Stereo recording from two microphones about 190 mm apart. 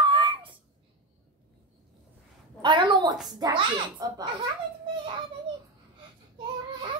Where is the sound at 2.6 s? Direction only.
25° right (ahead or behind).